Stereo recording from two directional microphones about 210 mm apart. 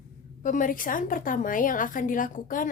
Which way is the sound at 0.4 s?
40° left (ahead or behind).